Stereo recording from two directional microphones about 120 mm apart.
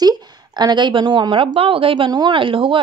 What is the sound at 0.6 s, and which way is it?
A woman's voice, 40° right (ahead or behind).